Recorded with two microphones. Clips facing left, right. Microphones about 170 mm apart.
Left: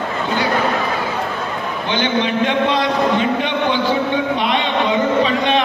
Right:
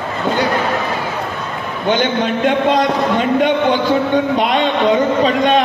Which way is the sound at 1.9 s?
45° right (ahead or behind).